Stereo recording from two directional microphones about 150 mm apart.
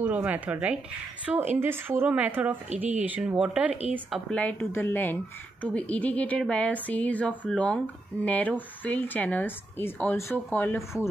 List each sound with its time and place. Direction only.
0.0 s speech: 10° right (ahead or behind)
4.3 s a woman's voice: 10° left (ahead or behind)